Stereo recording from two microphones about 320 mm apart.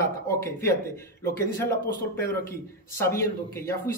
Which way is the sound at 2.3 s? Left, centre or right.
Centre.